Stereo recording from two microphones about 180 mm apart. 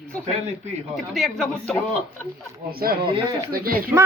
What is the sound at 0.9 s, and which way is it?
Speech, centre (ahead or behind).